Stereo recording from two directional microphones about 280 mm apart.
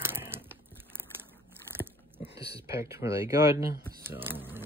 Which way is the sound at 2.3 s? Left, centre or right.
Centre.